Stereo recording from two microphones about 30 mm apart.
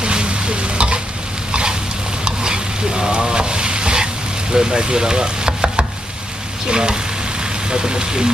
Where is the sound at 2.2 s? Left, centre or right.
Right.